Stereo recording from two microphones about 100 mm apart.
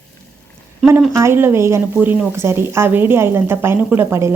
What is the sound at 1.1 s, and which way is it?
Speech, 25° right (ahead or behind).